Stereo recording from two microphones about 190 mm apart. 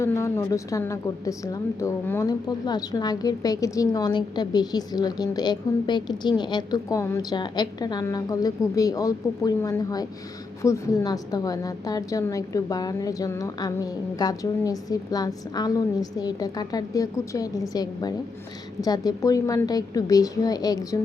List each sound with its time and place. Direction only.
0.0 s a woman's voice: 15° left (ahead or behind)